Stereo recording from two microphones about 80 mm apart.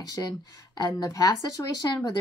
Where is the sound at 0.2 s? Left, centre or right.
Left.